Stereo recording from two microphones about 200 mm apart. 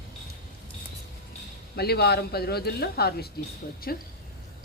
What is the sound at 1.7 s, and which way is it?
Speech, 55° left (ahead or behind).